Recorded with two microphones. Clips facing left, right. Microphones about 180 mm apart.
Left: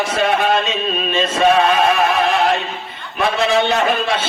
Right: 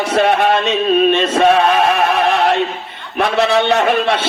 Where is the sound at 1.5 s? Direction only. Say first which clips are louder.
Right 1 dB; 50° right (ahead or behind).